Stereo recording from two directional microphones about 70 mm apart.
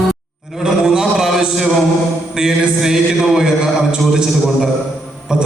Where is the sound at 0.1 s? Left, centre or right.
Centre.